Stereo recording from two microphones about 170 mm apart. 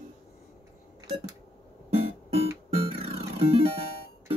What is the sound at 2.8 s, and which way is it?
Music, 35° right (ahead or behind).